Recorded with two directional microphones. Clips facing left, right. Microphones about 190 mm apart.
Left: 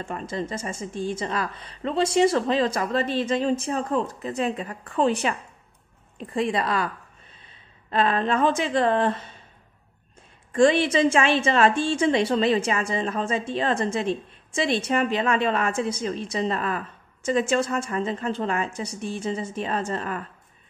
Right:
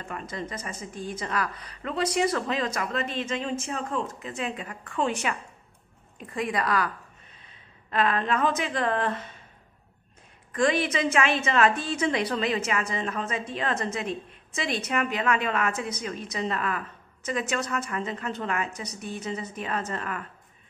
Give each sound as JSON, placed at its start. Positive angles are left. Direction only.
{"t": 0.0, "sound": "a woman's voice", "side_deg": 30}
{"t": 7.9, "sound": "a woman's voice", "side_deg": 30}
{"t": 10.5, "sound": "a woman's voice", "side_deg": 30}